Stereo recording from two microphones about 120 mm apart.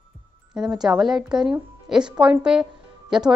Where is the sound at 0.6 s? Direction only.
5° right (ahead or behind).